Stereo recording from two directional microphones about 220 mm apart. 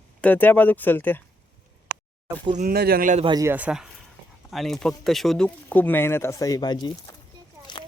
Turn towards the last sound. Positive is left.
turn(degrees=20)  # may be behind; listen again after turning